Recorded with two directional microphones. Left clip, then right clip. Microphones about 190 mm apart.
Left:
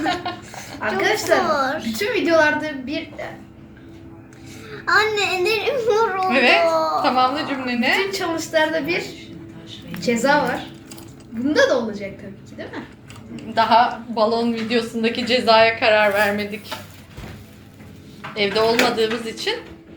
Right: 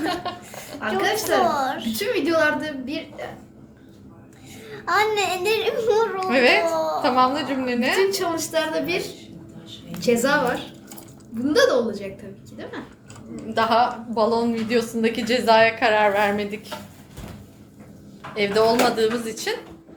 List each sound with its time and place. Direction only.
0.0 s a sound: 15° right (ahead or behind)
0.9 s a woman's voice: 30° right (ahead or behind)
1.5 s a woman's voice: 15° right (ahead or behind)
2.0 s a woman's voice: 30° right (ahead or behind)
4.7 s a woman's voice: 15° right (ahead or behind)
6.7 s a woman's voice: centre (ahead or behind)
7.0 s a woman's voice: 20° right (ahead or behind)
8.5 s a woman's voice: 35° right (ahead or behind)
10.0 s a woman's voice: 35° right (ahead or behind)
13.3 s a woman's voice: 15° right (ahead or behind)
18.3 s a woman's voice: 20° right (ahead or behind)